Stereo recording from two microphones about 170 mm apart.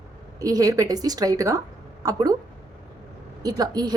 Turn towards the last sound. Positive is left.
turn(degrees=-25)  # may be behind; listen again after turning